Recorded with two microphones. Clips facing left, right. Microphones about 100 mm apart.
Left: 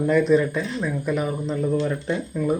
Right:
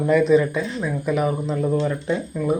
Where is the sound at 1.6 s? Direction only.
30° right (ahead or behind).